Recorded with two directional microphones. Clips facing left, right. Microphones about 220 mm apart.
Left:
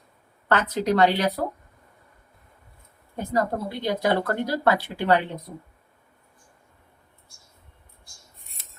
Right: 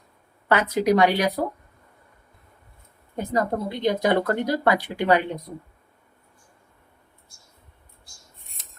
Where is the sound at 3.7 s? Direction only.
20° right (ahead or behind).